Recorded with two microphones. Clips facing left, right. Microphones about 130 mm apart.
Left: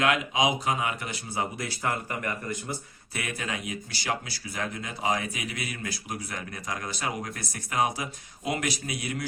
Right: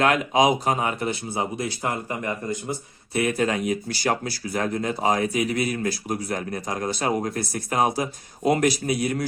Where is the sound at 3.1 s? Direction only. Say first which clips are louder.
Right 11 dB; 40° right (ahead or behind).